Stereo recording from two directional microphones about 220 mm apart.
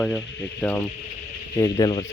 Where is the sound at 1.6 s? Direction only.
15° left (ahead or behind).